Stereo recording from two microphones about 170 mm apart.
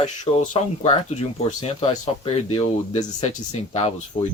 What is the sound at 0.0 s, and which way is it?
Speech, 40° left (ahead or behind).